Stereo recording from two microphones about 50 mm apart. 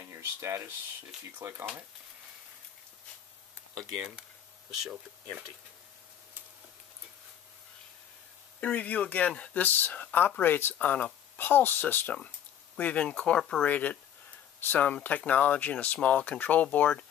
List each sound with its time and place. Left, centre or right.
0.0 s speech: right
1.4 s speech: right
4.0 s speech: centre
8.5 s speech: left
11.3 s speech: left
12.7 s speech: left
13.7 s speech: left
16.3 s speech: left